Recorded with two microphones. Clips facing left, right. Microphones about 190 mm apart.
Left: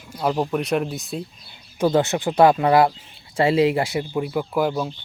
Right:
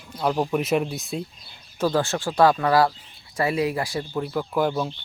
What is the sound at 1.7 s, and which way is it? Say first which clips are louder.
Speech: left 4 dB; 20° left (ahead or behind).